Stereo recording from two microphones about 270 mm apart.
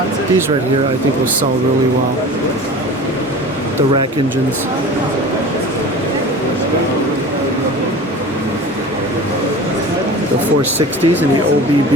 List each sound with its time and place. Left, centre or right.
10.8 s speech: right